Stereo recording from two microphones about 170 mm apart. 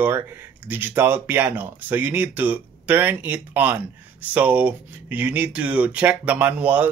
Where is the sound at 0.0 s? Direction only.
10° right (ahead or behind).